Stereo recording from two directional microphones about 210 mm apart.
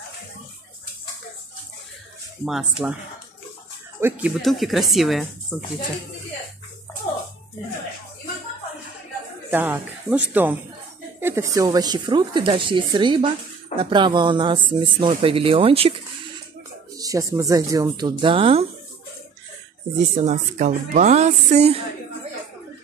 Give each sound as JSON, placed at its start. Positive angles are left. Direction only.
{"t": 2.4, "sound": "speech", "side_deg": -5}
{"t": 4.0, "sound": "speech", "side_deg": -5}
{"t": 9.5, "sound": "speech", "side_deg": -10}
{"t": 16.9, "sound": "speech", "side_deg": -15}
{"t": 20.0, "sound": "speech", "side_deg": -35}